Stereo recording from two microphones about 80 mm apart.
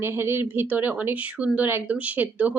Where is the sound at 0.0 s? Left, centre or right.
Right.